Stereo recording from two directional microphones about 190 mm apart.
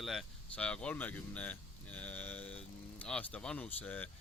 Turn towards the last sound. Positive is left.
turn(degrees=10)  # may be behind; listen again after turning